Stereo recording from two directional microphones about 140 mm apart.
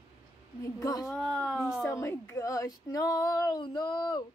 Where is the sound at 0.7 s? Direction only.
25° left (ahead or behind).